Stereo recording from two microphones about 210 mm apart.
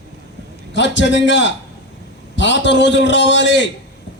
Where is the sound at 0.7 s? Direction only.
60° left (ahead or behind).